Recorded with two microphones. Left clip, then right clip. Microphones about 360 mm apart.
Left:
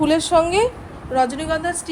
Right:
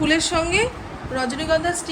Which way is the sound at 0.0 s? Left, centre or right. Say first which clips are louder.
Left 4 dB; centre.